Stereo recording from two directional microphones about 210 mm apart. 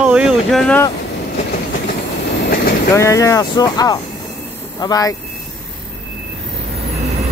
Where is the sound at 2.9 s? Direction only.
15° left (ahead or behind).